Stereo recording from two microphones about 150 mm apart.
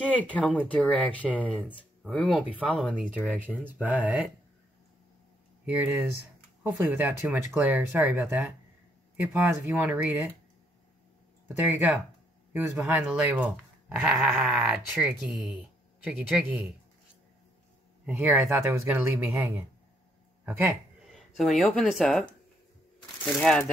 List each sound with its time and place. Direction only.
0.2 s speech: 10° left (ahead or behind)
2.9 s speech: 10° right (ahead or behind)
5.7 s speech: 10° right (ahead or behind)
12.5 s speech: 10° right (ahead or behind)
18.0 s speech: 5° right (ahead or behind)
21.1 s speech: centre (ahead or behind)